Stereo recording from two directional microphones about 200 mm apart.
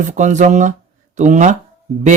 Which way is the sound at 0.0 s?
40° right (ahead or behind).